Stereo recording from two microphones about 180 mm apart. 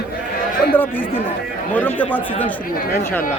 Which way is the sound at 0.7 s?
10° left (ahead or behind).